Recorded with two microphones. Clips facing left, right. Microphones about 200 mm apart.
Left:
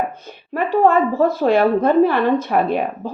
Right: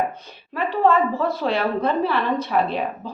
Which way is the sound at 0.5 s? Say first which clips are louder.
Left 4 dB; 50° left (ahead or behind).